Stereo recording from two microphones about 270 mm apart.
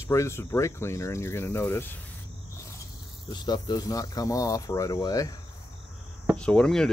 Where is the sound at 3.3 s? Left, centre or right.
Centre.